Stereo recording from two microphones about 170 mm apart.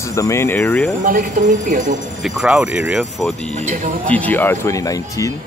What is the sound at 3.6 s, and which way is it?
Speech, 45° right (ahead or behind).